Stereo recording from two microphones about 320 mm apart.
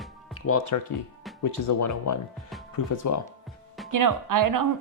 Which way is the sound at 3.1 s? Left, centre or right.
Left.